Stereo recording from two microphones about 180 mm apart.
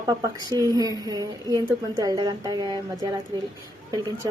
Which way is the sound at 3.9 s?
20° right (ahead or behind).